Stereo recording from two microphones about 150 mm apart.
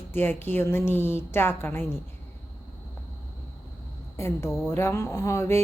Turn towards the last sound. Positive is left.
turn(degrees=20)  # may be behind; listen again after turning